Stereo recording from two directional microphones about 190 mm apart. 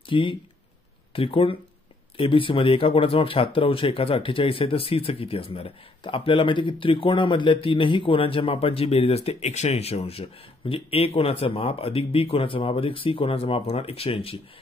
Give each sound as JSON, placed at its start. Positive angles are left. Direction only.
{"t": 0.1, "sound": "speech", "side_deg": 25}